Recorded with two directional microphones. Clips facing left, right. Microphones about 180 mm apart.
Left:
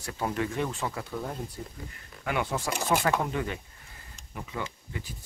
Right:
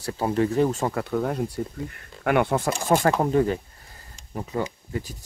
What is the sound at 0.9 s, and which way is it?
Speech, 70° right (ahead or behind).